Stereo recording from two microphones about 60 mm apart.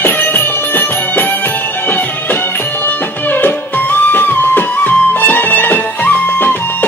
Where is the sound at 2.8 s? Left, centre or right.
Left.